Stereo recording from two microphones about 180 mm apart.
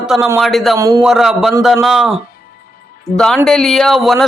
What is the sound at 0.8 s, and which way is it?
Speech, 20° right (ahead or behind).